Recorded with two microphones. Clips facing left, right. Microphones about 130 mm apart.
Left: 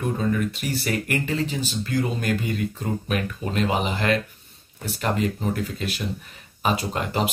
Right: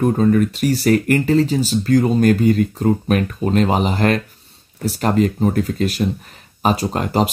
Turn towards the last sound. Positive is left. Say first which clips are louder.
# right 7 dB
turn(degrees=-40)  # may be behind; listen again after turning